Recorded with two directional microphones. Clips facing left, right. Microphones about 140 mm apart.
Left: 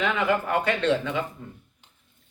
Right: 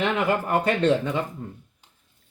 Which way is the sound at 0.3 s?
40° right (ahead or behind).